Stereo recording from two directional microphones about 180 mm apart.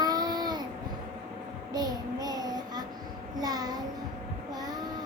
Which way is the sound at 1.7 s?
20° right (ahead or behind).